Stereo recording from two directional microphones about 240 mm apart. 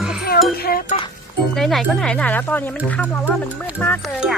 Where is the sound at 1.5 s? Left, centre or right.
Centre.